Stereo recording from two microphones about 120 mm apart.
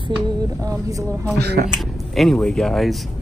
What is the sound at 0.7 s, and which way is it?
Speech, 30° right (ahead or behind).